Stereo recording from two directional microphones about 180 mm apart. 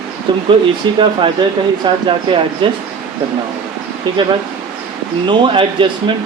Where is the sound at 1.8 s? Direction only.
25° right (ahead or behind).